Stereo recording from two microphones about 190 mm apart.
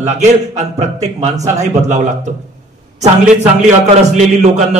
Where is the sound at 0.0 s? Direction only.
35° right (ahead or behind).